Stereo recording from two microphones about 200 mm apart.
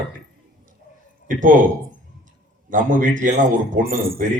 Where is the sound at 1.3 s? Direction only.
40° right (ahead or behind).